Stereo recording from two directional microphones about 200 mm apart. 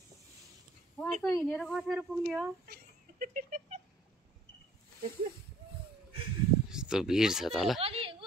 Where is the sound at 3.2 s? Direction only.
40° right (ahead or behind).